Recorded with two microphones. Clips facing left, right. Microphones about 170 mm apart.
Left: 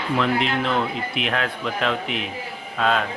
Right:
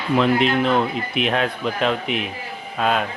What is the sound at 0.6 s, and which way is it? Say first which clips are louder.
Speech: right 4 dB; 15° right (ahead or behind).